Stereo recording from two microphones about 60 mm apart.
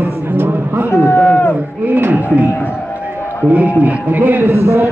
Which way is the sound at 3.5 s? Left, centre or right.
Right.